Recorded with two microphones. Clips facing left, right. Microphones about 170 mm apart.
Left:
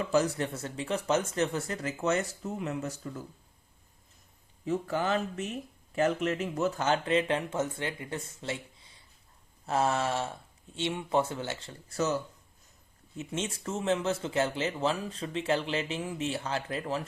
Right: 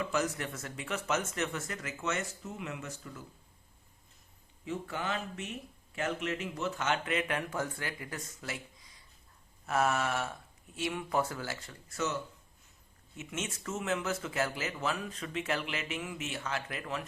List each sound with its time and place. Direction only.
0.0 s speech: 35° left (ahead or behind)
4.6 s speech: 40° left (ahead or behind)
13.1 s speech: 30° left (ahead or behind)